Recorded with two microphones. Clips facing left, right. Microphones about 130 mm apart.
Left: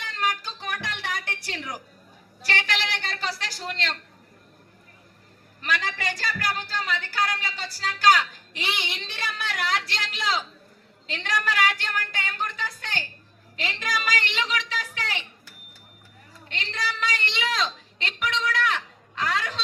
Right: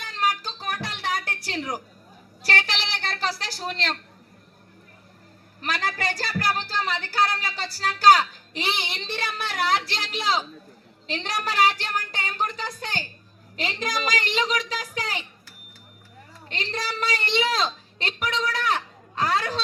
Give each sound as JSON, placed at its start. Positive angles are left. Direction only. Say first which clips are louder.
{"t": 0.0, "sound": "a sound", "louder": "right 2 dB", "side_deg": -40}
{"t": 2.4, "sound": "a woman's voice", "louder": "right 1 dB", "side_deg": -45}
{"t": 5.6, "sound": "a woman's voice", "louder": "right 1 dB", "side_deg": -35}
{"t": 12.1, "sound": "music", "louder": "right 3 dB", "side_deg": -40}
{"t": 13.6, "sound": "a woman's voice", "louder": "right 2 dB", "side_deg": -40}
{"t": 16.5, "sound": "a sound", "louder": "right 1 dB", "side_deg": -40}